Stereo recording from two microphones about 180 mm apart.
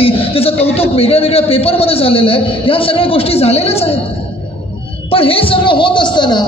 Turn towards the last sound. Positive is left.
turn(degrees=25)  # may be behind; listen again after turning